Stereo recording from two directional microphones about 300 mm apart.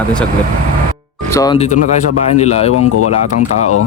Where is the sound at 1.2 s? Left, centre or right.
Centre.